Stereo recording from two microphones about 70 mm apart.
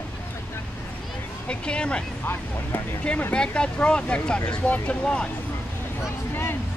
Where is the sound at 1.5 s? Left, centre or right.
Centre.